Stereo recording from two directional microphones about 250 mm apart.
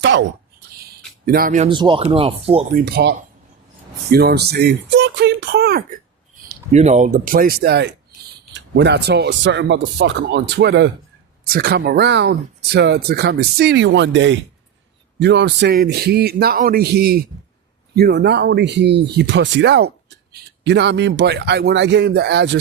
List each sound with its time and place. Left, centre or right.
0.0 s speech: right
1.2 s speech: right
1.7 s speech: centre
2.8 s speech: right
6.5 s speech: right